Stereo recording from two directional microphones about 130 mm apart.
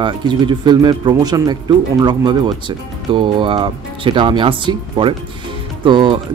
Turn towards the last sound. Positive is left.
turn(degrees=-40)  # may be behind; listen again after turning